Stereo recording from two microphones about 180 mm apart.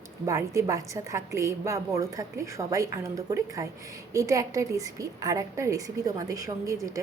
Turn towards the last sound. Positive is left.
turn(degrees=-20)  # may be behind; listen again after turning